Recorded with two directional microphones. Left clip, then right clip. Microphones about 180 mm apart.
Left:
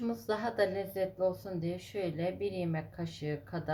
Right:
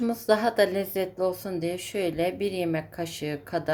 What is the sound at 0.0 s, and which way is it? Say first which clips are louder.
Speech: right 11 dB; 35° right (ahead or behind).